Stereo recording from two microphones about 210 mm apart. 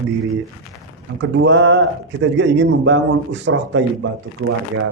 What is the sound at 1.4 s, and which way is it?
A man's voice, 55° right (ahead or behind).